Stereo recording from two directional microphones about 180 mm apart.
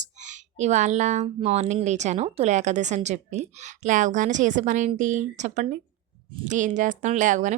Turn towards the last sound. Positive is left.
turn(degrees=-45)  # may be behind; listen again after turning